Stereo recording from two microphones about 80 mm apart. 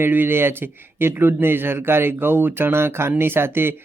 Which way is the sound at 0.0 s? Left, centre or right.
Right.